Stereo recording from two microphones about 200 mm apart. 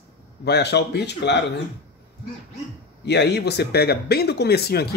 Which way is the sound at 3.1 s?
55° left (ahead or behind).